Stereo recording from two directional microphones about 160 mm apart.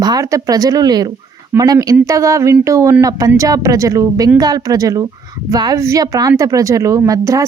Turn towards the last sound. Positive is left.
turn(degrees=-20)  # may be behind; listen again after turning